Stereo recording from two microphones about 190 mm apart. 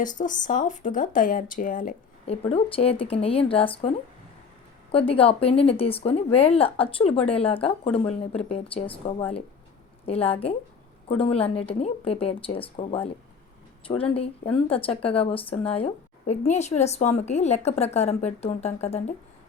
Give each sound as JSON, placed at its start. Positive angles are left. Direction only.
{"t": 0.0, "sound": "speech", "side_deg": 45}
{"t": 2.5, "sound": "a woman's voice", "side_deg": 30}